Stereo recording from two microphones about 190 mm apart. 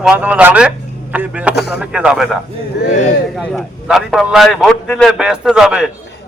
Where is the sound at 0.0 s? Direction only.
5° right (ahead or behind).